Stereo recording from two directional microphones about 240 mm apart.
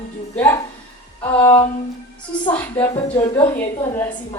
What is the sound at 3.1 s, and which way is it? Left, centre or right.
Speech, centre.